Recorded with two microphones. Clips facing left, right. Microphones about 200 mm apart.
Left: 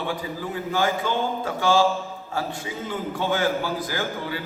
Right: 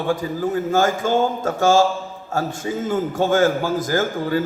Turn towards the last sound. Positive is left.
turn(degrees=-45)  # may be behind; listen again after turning